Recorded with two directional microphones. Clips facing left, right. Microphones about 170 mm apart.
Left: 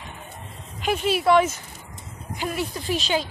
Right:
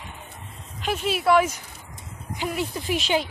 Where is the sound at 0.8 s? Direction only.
5° right (ahead or behind).